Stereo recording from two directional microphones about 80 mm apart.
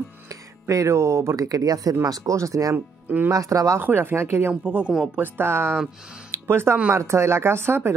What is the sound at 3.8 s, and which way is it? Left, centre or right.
Speech, right.